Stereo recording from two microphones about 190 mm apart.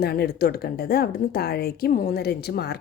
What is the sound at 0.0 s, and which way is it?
A woman's voice, 55° left (ahead or behind).